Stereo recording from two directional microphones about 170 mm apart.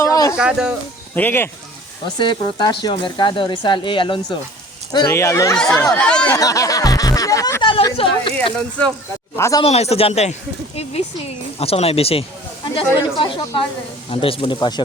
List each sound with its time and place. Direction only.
0.0 s a sound: 20° left (ahead or behind)
0.3 s speech: 5° right (ahead or behind)
1.1 s speech: 10° left (ahead or behind)
2.1 s speech: 25° left (ahead or behind)
6.0 s speech: 5° left (ahead or behind)
6.3 s speech: 20° left (ahead or behind)
9.3 s speech: 20° left (ahead or behind)
9.6 s speech: 40° left (ahead or behind)